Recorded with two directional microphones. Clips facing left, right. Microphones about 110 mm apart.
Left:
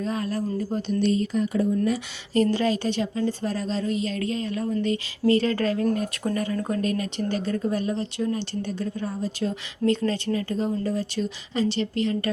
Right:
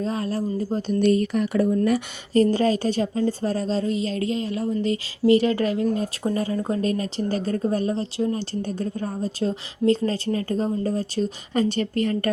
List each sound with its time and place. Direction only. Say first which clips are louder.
0.0 s a woman's voice: right 2 dB; 30° right (ahead or behind)
0.9 s speech: right 4 dB; 55° right (ahead or behind)
2.3 s a woman's voice: right 3 dB; 40° right (ahead or behind)
8.6 s a woman's voice: right 2 dB; 45° right (ahead or behind)